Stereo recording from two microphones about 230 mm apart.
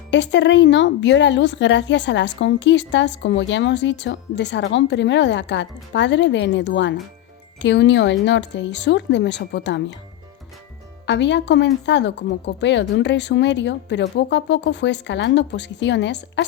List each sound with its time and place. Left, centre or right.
0.1 s a woman's voice: left
11.0 s a woman's voice: left